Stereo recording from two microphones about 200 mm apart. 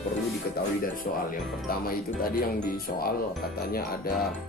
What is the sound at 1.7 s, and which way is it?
Speech, 45° left (ahead or behind).